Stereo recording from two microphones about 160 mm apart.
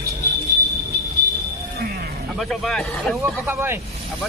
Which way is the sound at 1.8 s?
80° right.